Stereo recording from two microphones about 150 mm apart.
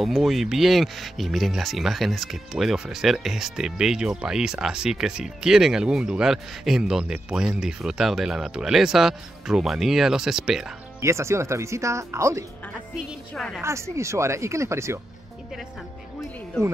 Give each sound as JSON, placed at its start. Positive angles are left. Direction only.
{"t": 0.0, "sound": "speech", "side_deg": 0}
{"t": 11.0, "sound": "speech", "side_deg": -20}
{"t": 13.3, "sound": "speech", "side_deg": 5}
{"t": 13.6, "sound": "speech", "side_deg": -20}